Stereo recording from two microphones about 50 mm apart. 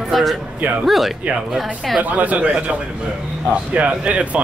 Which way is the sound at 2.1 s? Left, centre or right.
Right.